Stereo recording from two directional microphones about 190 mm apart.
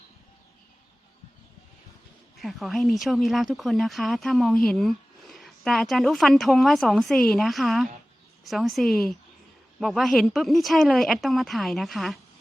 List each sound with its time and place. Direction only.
2.4 s speech: centre (ahead or behind)